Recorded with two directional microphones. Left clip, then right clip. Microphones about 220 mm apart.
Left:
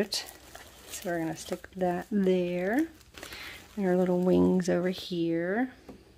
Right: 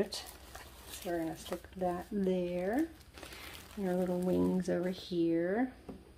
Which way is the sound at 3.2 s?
20° left (ahead or behind).